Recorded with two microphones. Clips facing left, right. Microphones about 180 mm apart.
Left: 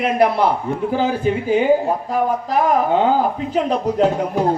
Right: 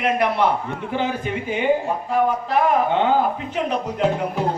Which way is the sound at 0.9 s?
35° left (ahead or behind).